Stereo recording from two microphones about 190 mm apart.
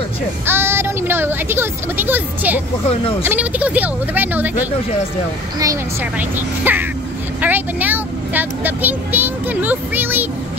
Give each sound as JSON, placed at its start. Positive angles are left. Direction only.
{"t": 0.5, "sound": "speech", "side_deg": -10}
{"t": 2.9, "sound": "speech", "side_deg": 30}
{"t": 3.3, "sound": "speech", "side_deg": -10}